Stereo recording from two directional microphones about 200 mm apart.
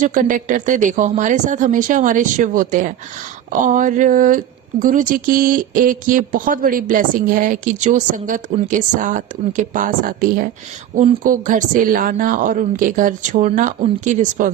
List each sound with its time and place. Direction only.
0.0 s speech: 40° right (ahead or behind)